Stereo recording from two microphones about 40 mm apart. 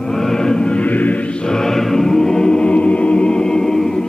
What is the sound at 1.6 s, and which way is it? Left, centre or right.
Choir, centre.